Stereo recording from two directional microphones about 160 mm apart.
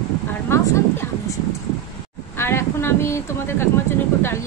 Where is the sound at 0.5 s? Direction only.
15° left (ahead or behind).